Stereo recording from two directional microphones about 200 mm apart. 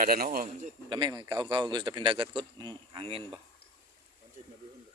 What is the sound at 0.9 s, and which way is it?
A man's voice, 20° right (ahead or behind).